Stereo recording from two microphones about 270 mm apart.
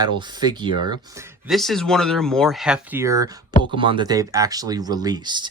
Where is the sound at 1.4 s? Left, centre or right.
Centre.